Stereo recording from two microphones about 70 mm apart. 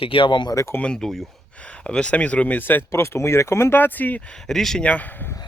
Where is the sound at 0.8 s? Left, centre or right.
Centre; by 4.2 s left.